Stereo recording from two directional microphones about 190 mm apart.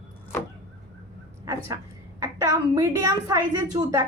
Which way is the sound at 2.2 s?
15° right (ahead or behind).